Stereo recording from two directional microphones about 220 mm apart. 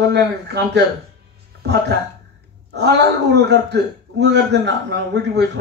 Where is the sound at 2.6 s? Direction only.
50° right (ahead or behind).